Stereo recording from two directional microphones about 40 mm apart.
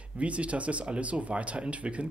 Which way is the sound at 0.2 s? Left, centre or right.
Right.